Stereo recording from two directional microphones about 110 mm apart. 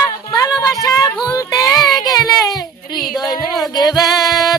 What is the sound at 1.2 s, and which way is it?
Speech, 30° left (ahead or behind).